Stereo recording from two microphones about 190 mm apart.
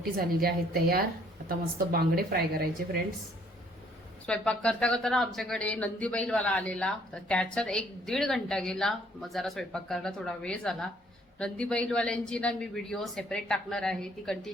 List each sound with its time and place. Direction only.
0.0 s a woman's voice: 50° right (ahead or behind)
4.3 s speech: 5° left (ahead or behind)